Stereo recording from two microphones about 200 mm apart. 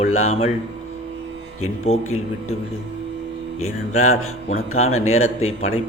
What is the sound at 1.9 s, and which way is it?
Speech, 90° left.